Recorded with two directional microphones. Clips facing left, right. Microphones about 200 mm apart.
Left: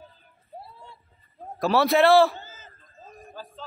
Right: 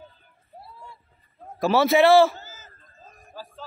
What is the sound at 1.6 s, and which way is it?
Speech, centre (ahead or behind).